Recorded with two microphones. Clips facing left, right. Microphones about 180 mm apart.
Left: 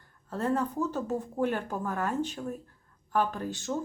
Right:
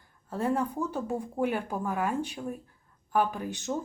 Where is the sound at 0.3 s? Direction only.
10° right (ahead or behind).